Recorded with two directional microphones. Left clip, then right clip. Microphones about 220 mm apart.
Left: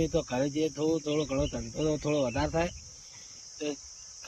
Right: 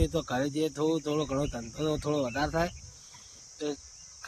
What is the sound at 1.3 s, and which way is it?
Speech, 45° right (ahead or behind).